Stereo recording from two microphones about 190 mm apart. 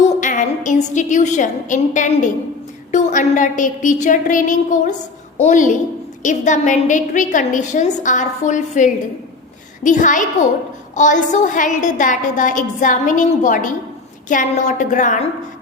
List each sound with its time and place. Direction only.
0.2 s a woman's voice: 40° left (ahead or behind)